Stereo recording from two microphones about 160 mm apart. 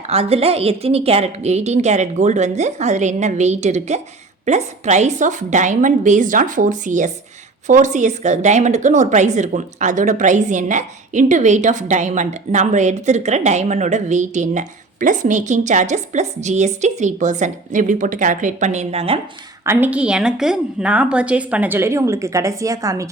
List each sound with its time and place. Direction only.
0.1 s a woman's voice: 40° right (ahead or behind)
19.6 s a woman's voice: 10° right (ahead or behind)